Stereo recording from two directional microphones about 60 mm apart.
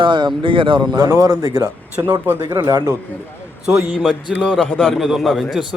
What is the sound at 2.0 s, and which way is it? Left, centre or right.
Speech, right.